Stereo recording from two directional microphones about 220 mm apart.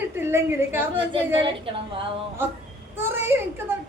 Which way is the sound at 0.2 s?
10° right (ahead or behind).